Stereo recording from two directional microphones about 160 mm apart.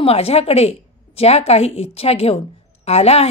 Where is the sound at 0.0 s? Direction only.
40° left (ahead or behind).